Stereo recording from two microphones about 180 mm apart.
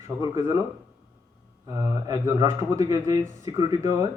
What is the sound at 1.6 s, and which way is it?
Speech, 20° right (ahead or behind).